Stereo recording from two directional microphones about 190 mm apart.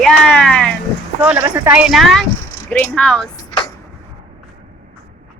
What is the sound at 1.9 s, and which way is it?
Speech, centre (ahead or behind).